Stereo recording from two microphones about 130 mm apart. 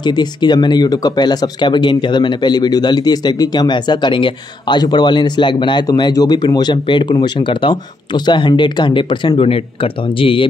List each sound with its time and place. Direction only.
0.0 s speech: 35° left (ahead or behind)